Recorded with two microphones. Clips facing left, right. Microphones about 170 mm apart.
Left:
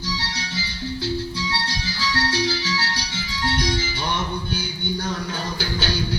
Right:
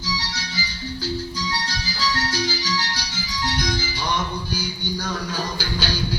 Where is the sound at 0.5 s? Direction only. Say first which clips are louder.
Left 3 dB; 25° left (ahead or behind).